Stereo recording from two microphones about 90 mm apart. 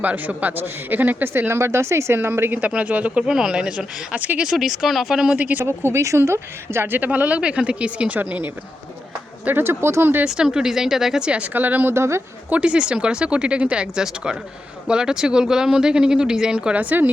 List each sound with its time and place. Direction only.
0.0 s a man's voice: 15° right (ahead or behind)
4.5 s speech: 5° right (ahead or behind)
5.4 s a man's voice: 20° right (ahead or behind)
9.4 s a man's voice: 20° right (ahead or behind)
10.2 s speech: 5° right (ahead or behind); by 12.2 s 30° right (ahead or behind)
12.5 s speech: 15° right (ahead or behind)